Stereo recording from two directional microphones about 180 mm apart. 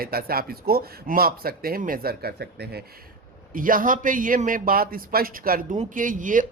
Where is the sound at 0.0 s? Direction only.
55° right (ahead or behind).